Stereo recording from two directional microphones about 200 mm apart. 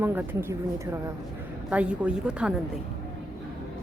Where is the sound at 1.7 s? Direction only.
5° right (ahead or behind).